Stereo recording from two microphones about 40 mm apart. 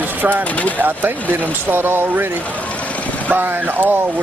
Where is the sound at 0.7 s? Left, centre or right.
Right.